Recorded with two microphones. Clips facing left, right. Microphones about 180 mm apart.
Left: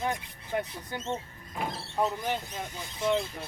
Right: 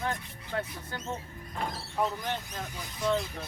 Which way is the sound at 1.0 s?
25° left (ahead or behind).